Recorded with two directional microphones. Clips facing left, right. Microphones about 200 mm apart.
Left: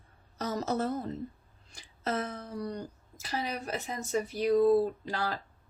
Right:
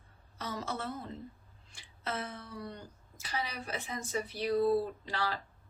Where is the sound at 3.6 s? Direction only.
45° left (ahead or behind).